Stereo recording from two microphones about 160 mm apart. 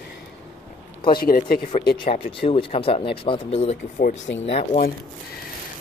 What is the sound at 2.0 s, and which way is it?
Speech, 35° left (ahead or behind).